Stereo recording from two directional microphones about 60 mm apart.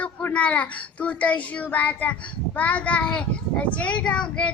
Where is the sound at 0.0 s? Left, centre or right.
Left.